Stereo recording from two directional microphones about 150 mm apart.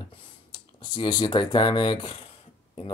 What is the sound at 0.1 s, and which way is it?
Speech, 35° left (ahead or behind).